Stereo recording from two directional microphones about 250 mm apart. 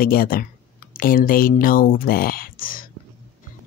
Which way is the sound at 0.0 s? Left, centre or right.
Left.